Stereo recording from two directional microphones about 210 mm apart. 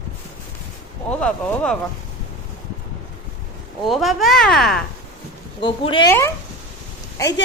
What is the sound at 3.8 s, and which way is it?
Speech, centre (ahead or behind).